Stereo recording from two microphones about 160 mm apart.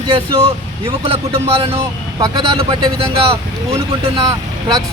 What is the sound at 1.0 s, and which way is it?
Speech, 35° right (ahead or behind).